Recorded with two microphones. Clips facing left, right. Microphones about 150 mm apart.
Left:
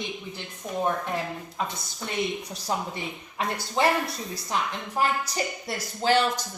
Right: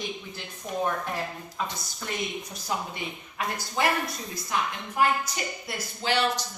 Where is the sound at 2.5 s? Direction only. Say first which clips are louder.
Left 2 dB; 35° left (ahead or behind).